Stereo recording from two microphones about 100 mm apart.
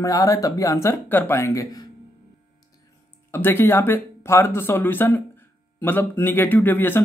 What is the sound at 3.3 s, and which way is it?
Speech, 20° left (ahead or behind).